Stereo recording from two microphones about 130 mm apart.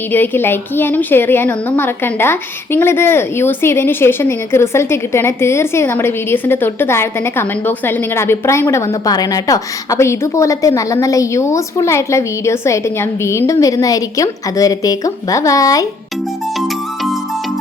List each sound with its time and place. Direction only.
0.1 s a woman's voice: 15° left (ahead or behind)
16.6 s music: centre (ahead or behind)